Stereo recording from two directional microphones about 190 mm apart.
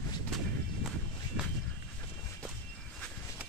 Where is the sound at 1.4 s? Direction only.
5° right (ahead or behind).